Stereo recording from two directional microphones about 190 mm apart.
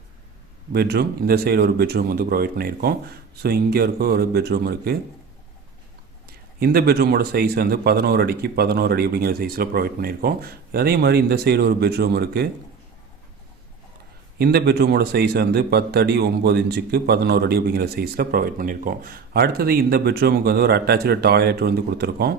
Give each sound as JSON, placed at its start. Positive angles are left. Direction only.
{"t": 0.7, "sound": "a man's voice", "side_deg": -60}
{"t": 6.2, "sound": "a man's voice", "side_deg": -55}
{"t": 14.3, "sound": "a man's voice", "side_deg": -60}